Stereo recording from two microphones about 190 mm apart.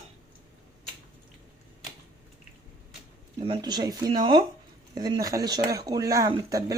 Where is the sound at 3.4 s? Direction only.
25° right (ahead or behind).